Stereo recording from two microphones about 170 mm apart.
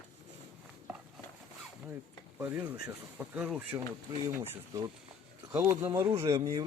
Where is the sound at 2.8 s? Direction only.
10° right (ahead or behind).